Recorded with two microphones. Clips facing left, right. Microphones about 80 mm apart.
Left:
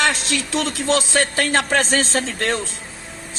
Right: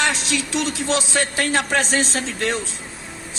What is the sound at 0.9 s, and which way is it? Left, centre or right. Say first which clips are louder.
A man's voice: left 5 dB; left.